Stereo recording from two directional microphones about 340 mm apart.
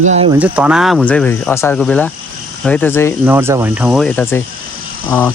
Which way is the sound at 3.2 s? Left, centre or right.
Centre.